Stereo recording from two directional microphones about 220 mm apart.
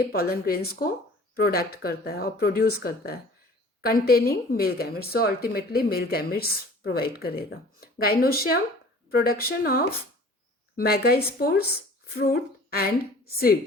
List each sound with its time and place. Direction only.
0.0 s a woman's voice: 45° left (ahead or behind)